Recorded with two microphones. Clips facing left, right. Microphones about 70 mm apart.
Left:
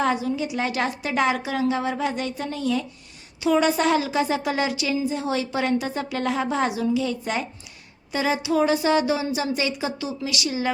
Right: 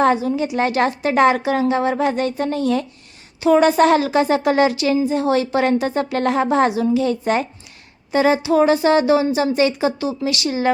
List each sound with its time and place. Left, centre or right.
0.0 s a woman's voice: right